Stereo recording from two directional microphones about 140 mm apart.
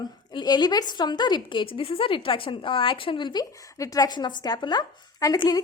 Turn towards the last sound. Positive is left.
turn(degrees=30)  # may be behind; listen again after turning